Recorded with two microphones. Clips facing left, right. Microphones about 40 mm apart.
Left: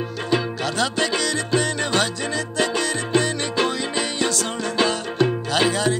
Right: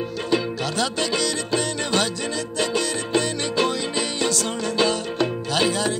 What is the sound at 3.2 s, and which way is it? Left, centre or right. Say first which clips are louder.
Music: left 1 dB; left.